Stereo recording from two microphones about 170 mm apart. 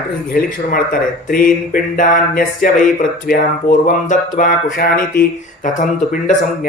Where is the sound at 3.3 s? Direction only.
60° left (ahead or behind).